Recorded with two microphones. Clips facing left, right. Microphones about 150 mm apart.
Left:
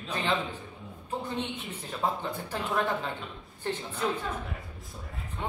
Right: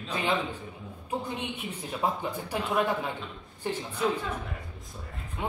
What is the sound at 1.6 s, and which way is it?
Speech, 10° right (ahead or behind).